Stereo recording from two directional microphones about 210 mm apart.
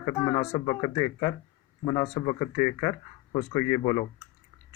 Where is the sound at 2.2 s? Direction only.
30° left (ahead or behind).